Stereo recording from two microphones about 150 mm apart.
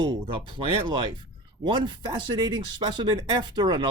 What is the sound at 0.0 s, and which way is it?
Speech, 35° right (ahead or behind).